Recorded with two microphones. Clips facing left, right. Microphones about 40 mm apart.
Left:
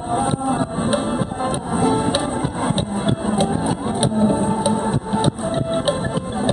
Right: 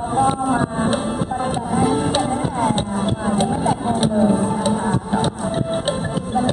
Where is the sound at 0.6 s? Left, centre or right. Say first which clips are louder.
Right 1 dB; centre.